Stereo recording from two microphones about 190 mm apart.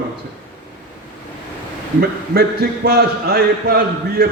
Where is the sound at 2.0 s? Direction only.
55° right (ahead or behind).